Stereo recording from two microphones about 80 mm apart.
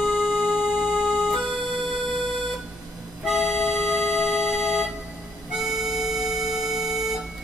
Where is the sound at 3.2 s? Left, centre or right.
Centre.